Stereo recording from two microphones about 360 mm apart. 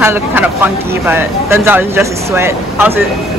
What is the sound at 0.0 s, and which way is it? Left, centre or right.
Speech, centre.